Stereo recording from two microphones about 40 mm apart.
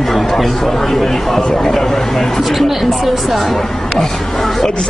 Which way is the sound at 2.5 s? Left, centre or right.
Centre.